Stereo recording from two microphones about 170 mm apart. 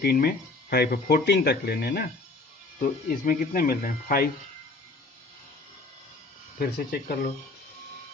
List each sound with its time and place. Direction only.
0.0 s speech: 60° left (ahead or behind)
2.8 s speech: 55° left (ahead or behind)
6.6 s speech: 65° left (ahead or behind)